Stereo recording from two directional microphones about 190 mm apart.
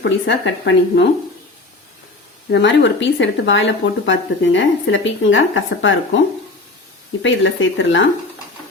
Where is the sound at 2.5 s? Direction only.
70° left (ahead or behind); by 6.0 s 90° left.